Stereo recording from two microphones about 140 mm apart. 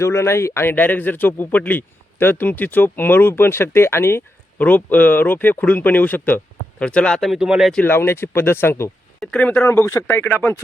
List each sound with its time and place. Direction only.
0.0 s speech: 20° left (ahead or behind); by 7.7 s 5° right (ahead or behind)
7.7 s speech: 10° left (ahead or behind)